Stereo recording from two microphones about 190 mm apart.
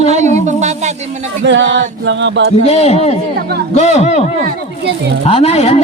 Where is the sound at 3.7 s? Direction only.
35° left (ahead or behind).